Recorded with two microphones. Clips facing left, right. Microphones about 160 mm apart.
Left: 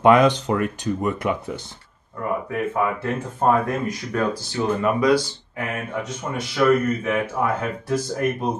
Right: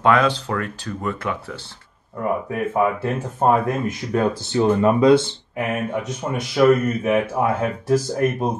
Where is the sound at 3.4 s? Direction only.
20° right (ahead or behind).